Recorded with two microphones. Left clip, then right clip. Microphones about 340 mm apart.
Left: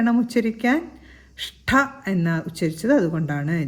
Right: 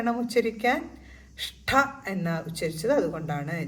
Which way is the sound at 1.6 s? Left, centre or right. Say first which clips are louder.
Left 3 dB; left.